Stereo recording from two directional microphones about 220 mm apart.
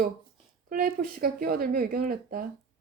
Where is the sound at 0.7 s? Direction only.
40° right (ahead or behind).